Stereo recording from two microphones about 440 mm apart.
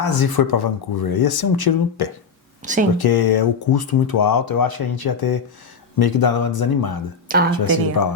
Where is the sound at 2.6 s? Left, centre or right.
Centre.